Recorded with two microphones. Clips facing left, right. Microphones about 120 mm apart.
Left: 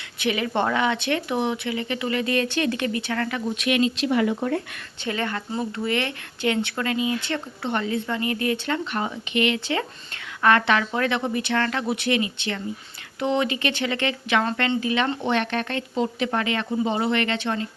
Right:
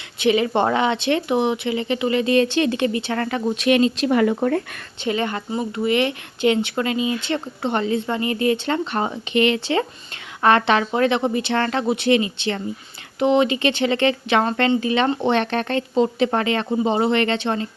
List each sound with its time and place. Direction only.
0.2 s speech: 25° right (ahead or behind); by 4.8 s 50° right (ahead or behind)
5.0 s speech: 20° right (ahead or behind)